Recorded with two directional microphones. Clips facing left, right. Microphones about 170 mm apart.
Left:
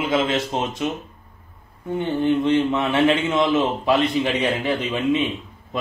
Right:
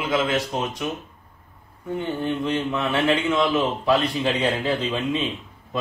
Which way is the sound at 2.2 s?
20° left (ahead or behind).